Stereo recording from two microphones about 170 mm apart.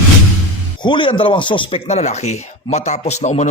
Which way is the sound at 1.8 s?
40° left (ahead or behind).